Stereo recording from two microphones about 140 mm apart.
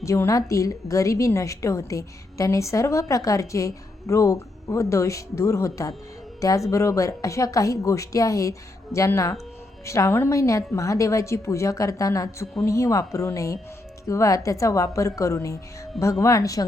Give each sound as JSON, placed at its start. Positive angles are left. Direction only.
{"t": 0.0, "sound": "a woman's voice", "side_deg": 20}